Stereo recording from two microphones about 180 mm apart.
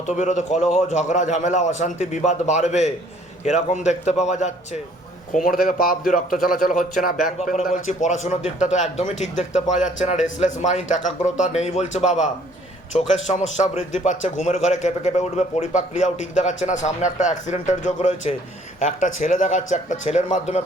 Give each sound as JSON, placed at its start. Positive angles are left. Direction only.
{"t": 0.1, "sound": "a man's voice", "side_deg": 40}